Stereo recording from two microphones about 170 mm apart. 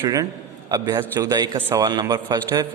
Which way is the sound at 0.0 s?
20° right (ahead or behind).